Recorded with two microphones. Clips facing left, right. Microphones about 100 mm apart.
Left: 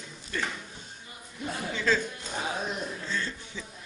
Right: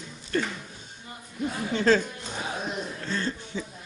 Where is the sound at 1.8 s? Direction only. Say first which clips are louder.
Right 6 dB; 55° right (ahead or behind).